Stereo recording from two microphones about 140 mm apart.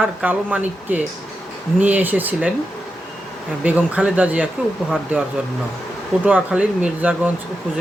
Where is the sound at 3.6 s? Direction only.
10° right (ahead or behind).